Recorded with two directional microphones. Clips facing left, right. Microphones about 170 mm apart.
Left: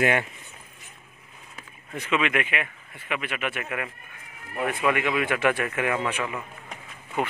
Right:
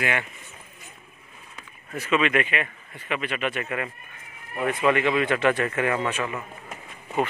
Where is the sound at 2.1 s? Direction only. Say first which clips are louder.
Right 3 dB; 10° left (ahead or behind).